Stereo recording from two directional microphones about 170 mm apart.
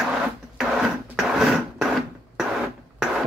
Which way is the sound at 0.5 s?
Centre (ahead or behind).